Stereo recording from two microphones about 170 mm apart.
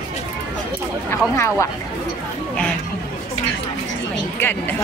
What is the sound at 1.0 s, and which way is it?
Speech, 15° left (ahead or behind).